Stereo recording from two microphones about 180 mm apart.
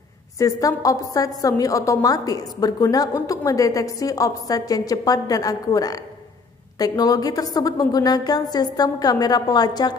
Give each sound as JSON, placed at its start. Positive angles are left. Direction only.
{"t": 0.4, "sound": "a woman's voice", "side_deg": 20}